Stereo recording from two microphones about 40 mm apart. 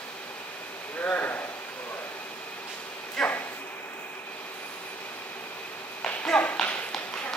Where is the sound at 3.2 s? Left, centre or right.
Centre.